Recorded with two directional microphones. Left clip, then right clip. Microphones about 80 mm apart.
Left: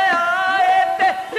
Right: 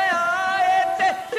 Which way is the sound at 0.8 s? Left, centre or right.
Left.